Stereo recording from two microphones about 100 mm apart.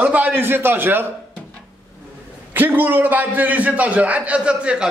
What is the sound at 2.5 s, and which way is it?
A man's voice, 20° right (ahead or behind).